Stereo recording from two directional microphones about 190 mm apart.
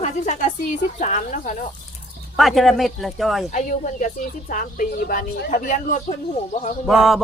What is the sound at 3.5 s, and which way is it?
Speech, 40° left (ahead or behind).